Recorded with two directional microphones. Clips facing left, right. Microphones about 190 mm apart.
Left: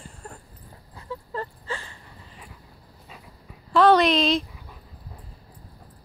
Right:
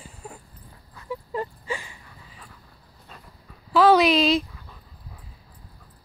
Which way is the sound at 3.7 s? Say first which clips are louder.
Right 1 dB; 5° right (ahead or behind).